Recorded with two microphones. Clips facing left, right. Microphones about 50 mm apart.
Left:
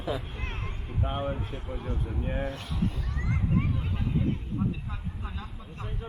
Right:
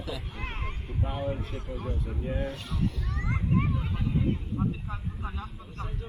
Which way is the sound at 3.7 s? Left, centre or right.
Centre.